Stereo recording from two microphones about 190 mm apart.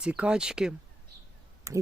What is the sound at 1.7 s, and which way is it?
Speech, 15° right (ahead or behind).